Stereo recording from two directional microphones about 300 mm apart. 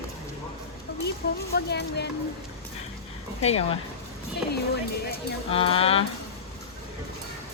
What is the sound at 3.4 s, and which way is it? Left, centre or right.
Music, centre.